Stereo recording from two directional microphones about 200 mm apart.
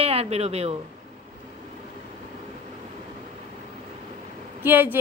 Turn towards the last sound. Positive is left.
turn(degrees=-10)  # may be behind; listen again after turning